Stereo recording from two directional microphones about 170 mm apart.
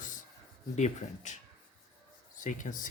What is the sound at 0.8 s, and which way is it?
Speech, 45° left (ahead or behind).